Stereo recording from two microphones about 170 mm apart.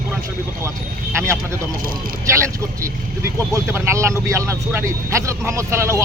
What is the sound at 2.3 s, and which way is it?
Speech, 15° right (ahead or behind).